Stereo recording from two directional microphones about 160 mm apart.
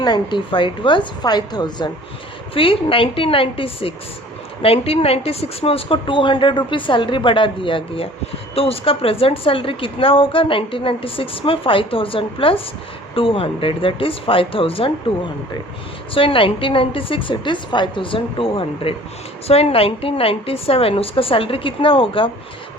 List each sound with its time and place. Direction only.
0.0 s a woman's voice: 30° left (ahead or behind)
16.1 s a woman's voice: 35° left (ahead or behind)